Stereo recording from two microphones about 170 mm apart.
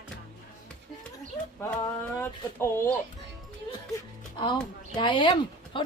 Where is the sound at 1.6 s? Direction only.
15° left (ahead or behind).